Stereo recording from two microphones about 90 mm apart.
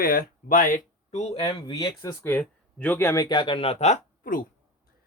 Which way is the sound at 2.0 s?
30° left (ahead or behind).